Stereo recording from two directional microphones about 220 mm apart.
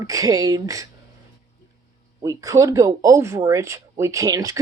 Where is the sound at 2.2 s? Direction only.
15° right (ahead or behind).